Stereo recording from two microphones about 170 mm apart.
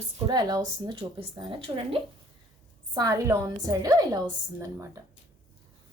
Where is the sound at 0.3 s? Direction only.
25° right (ahead or behind).